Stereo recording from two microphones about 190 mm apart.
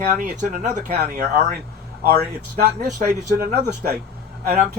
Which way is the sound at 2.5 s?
50° right (ahead or behind).